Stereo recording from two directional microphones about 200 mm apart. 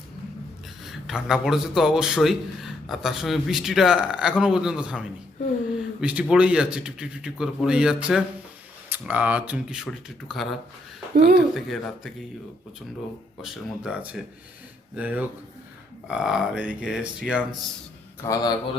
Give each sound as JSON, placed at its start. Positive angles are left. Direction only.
{"t": 0.9, "sound": "a man's voice", "side_deg": 0}
{"t": 11.1, "sound": "speech", "side_deg": -55}
{"t": 11.5, "sound": "a man's voice", "side_deg": 0}
{"t": 13.4, "sound": "a man's voice", "side_deg": -5}
{"t": 18.2, "sound": "a man's voice", "side_deg": 10}